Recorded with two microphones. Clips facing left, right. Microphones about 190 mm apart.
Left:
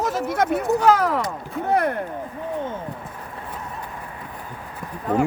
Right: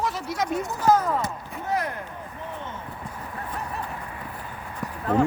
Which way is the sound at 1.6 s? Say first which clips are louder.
Left 7 dB; 60° left (ahead or behind).